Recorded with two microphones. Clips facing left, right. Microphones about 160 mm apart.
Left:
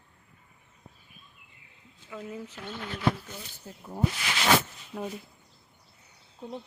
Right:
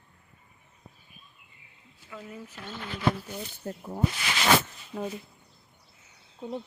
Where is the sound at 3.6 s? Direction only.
65° right (ahead or behind).